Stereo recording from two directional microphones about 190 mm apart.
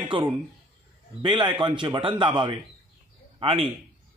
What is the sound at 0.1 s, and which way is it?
A man's voice, 25° right (ahead or behind).